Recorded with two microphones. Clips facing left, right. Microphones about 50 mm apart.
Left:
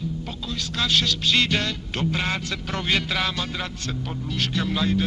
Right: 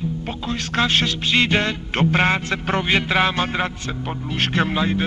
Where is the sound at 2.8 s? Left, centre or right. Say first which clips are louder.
Right 5 dB; right.